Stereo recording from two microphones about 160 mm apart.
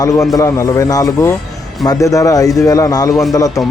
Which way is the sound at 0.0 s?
20° left (ahead or behind).